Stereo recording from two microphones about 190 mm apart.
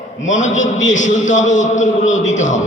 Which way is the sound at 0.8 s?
40° left (ahead or behind).